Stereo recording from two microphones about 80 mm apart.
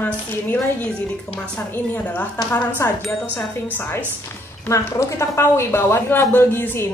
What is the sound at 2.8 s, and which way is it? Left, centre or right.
Speech, left.